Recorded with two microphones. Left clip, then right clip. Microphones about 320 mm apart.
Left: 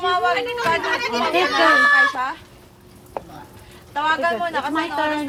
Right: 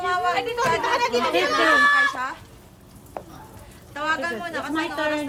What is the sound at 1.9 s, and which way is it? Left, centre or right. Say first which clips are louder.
Speech: left 4 dB; centre.